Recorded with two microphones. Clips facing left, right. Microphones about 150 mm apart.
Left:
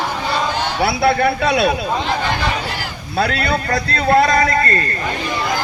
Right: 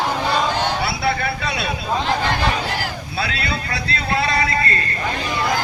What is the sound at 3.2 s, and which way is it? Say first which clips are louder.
A man's voice: left 8 dB; 45° left (ahead or behind).